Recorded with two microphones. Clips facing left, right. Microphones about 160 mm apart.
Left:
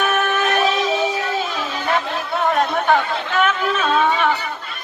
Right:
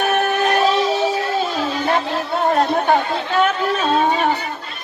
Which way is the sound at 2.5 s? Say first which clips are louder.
Right 1 dB; 35° right (ahead or behind).